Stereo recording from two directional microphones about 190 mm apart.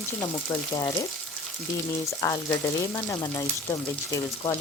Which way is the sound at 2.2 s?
15° left (ahead or behind).